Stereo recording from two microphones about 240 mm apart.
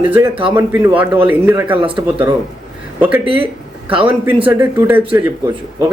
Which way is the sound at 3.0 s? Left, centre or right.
Centre.